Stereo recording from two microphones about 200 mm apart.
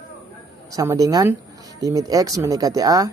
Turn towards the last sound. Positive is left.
turn(degrees=-20)  # may be behind; listen again after turning